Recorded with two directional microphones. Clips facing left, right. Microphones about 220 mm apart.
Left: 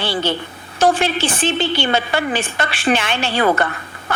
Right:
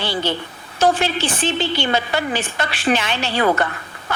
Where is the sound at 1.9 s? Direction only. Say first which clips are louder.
Left 2 dB; 55° left (ahead or behind).